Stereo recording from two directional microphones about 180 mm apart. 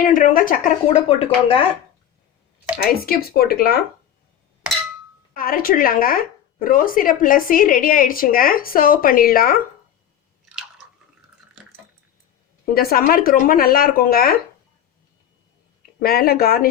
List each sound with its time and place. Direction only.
0.0 s speech: 50° left (ahead or behind)
1.0 s speech: 30° left (ahead or behind)
2.8 s speech: 55° left (ahead or behind)
5.3 s speech: 55° left (ahead or behind)
12.6 s speech: 55° left (ahead or behind)
16.0 s speech: 55° left (ahead or behind)